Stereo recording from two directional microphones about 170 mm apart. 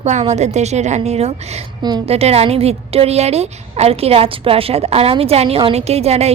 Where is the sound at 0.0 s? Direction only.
40° right (ahead or behind).